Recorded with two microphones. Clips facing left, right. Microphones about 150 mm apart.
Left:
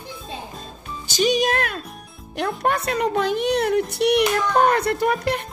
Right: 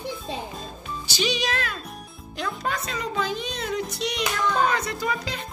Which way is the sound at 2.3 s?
60° left (ahead or behind).